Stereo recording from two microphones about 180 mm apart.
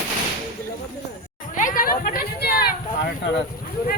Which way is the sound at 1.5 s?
50° left (ahead or behind).